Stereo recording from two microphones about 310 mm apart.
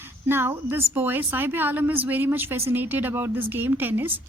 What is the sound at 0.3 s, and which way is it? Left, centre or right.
A woman's voice, centre.